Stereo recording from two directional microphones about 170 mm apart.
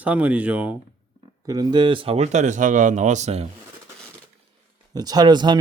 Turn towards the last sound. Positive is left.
turn(degrees=-25)  # may be behind; listen again after turning